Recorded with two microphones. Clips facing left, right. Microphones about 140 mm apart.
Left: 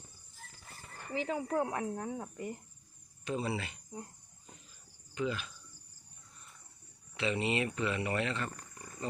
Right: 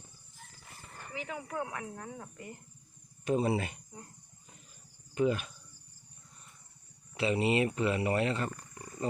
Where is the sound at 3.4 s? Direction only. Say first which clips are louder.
Right 6 dB; 45° right (ahead or behind).